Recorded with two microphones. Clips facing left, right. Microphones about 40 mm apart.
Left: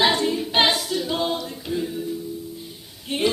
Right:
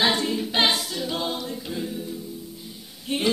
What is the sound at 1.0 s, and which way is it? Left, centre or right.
A capella, left.